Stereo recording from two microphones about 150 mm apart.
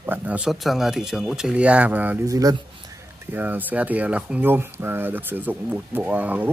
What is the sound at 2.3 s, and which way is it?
Speech, 25° right (ahead or behind).